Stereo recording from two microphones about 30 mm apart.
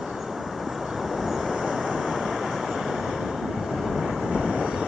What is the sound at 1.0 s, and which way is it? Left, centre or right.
Vehicle, centre.